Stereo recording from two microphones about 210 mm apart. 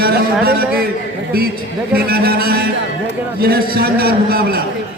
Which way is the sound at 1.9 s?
45° right (ahead or behind).